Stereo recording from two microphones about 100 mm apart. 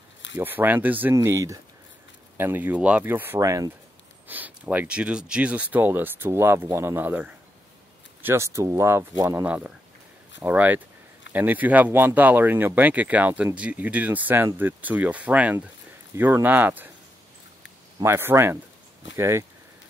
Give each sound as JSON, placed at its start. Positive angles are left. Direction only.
{"t": 0.4, "sound": "speech", "side_deg": -20}
{"t": 1.1, "sound": "speech", "side_deg": -30}
{"t": 3.3, "sound": "speech", "side_deg": -35}
{"t": 4.3, "sound": "speech", "side_deg": -15}
{"t": 10.4, "sound": "speech", "side_deg": -15}
{"t": 18.0, "sound": "speech", "side_deg": -25}